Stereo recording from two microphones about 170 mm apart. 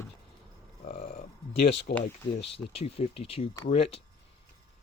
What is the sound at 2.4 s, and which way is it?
Speech, 35° left (ahead or behind).